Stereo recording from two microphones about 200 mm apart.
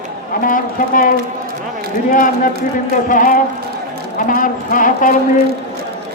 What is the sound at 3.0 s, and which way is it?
A man's voice, 40° left (ahead or behind).